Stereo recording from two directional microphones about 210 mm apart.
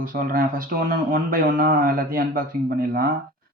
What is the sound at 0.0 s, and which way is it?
Speech, 40° right (ahead or behind).